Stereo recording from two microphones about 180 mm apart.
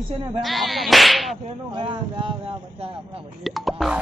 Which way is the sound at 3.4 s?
Centre (ahead or behind).